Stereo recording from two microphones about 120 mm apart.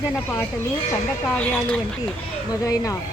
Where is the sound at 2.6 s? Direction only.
25° left (ahead or behind).